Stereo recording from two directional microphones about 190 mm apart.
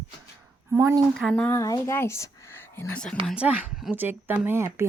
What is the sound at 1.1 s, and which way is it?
Speech, 5° left (ahead or behind).